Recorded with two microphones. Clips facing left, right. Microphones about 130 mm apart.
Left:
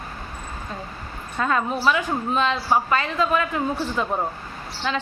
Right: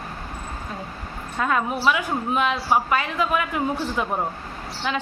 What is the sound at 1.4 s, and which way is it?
A woman's voice, 5° right (ahead or behind).